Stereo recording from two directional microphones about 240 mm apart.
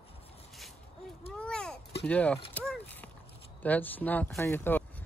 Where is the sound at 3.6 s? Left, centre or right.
Centre.